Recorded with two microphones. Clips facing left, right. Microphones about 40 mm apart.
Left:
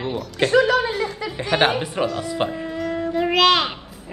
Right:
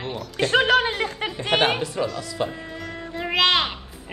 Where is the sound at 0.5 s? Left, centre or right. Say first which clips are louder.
Left 1 dB; right.